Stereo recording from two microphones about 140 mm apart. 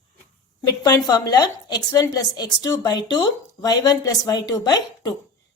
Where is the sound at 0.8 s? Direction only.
30° left (ahead or behind).